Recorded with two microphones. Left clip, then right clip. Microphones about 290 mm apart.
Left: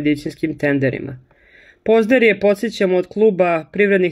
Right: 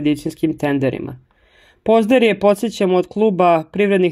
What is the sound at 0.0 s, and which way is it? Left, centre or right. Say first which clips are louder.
Speech: right 1 dB; centre.